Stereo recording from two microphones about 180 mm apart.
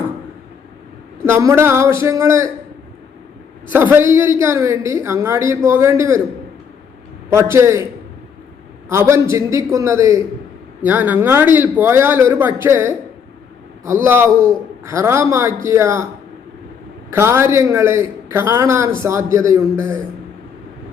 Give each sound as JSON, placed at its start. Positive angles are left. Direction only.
{"t": 1.2, "sound": "a man's voice", "side_deg": -15}
{"t": 3.7, "sound": "a man's voice", "side_deg": -10}
{"t": 7.3, "sound": "a man's voice", "side_deg": -15}
{"t": 8.9, "sound": "a man's voice", "side_deg": -15}
{"t": 17.1, "sound": "a man's voice", "side_deg": -15}